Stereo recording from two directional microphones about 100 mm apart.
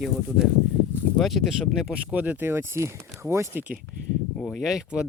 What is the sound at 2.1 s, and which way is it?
Speech, 15° right (ahead or behind).